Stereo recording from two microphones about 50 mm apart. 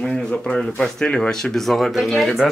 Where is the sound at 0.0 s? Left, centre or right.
Centre.